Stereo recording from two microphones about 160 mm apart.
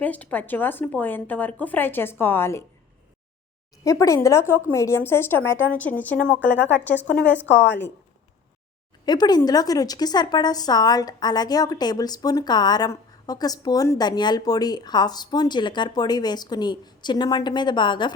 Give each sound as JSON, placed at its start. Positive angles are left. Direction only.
{"t": 0.0, "sound": "a woman's voice", "side_deg": 10}
{"t": 3.8, "sound": "a woman's voice", "side_deg": 20}
{"t": 9.0, "sound": "a woman's voice", "side_deg": 25}